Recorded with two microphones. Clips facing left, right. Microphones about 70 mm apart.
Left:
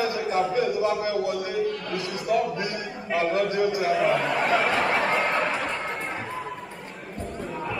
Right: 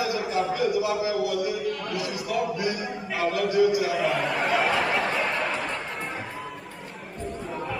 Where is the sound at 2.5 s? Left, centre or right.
Left.